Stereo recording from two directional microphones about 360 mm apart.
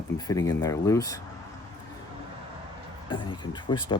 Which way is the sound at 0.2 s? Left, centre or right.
Centre.